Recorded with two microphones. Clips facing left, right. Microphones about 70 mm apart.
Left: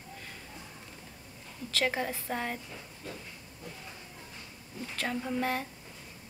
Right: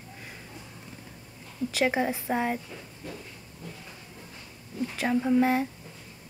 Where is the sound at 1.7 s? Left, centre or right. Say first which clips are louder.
Right 5 dB; centre.